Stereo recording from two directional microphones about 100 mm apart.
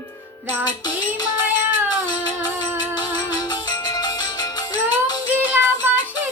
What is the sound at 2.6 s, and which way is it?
Music, 45° left (ahead or behind).